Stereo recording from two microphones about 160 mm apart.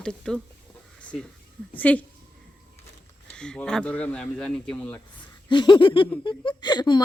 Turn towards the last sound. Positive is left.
turn(degrees=25)  # may be behind; listen again after turning